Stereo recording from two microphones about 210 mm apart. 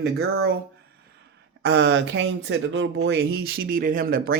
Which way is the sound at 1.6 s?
55° right (ahead or behind).